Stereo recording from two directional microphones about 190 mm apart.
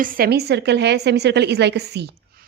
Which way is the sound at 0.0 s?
50° right (ahead or behind).